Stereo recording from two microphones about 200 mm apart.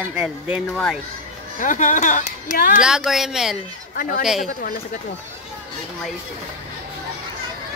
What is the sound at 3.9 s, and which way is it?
Speech, 45° left (ahead or behind).